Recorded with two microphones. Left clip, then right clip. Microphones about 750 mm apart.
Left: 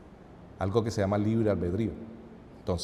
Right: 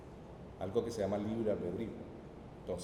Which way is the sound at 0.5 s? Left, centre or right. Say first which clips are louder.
Left 7 dB; left.